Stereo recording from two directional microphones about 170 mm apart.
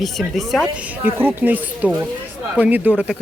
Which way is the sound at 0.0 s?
Centre (ahead or behind).